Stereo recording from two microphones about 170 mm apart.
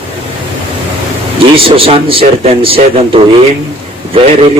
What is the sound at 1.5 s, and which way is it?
Speech, 35° right (ahead or behind).